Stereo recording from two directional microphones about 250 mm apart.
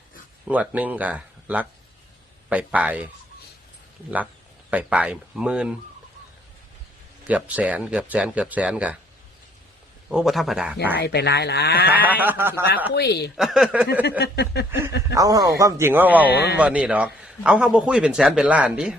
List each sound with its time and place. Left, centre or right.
0.4 s a man's voice: centre
4.7 s a man's voice: centre
7.3 s a man's voice: centre
10.1 s a man's voice: centre
11.0 s speech: left
11.9 s a man's voice: centre
12.9 s speech: left
13.3 s a man's voice: centre
14.2 s speech: left
14.7 s a man's voice: centre